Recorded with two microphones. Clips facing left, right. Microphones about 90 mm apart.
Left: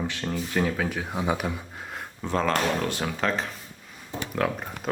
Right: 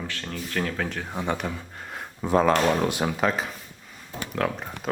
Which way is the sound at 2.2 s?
10° right (ahead or behind).